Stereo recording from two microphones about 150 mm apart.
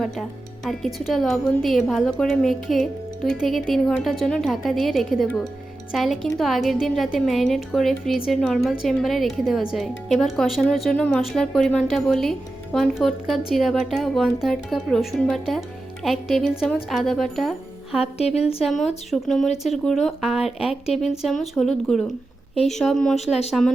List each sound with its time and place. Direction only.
0.0 s a woman's voice: centre (ahead or behind)
18.0 s a woman's voice: 45° left (ahead or behind)
18.6 s a woman's voice: centre (ahead or behind)